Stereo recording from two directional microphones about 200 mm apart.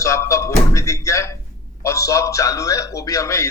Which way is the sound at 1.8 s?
15° left (ahead or behind).